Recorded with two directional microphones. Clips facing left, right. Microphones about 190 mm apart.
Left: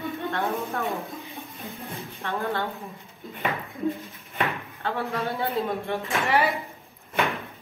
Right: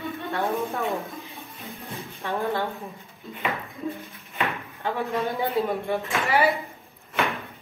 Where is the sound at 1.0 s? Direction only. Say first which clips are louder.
Left 1 dB; centre (ahead or behind).